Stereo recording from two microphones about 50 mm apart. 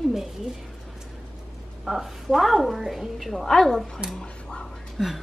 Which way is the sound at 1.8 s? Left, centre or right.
Centre.